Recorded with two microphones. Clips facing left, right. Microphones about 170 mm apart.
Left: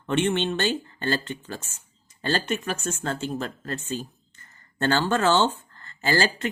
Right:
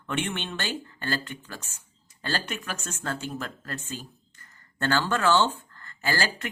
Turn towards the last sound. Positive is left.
turn(degrees=25)  # may be behind; listen again after turning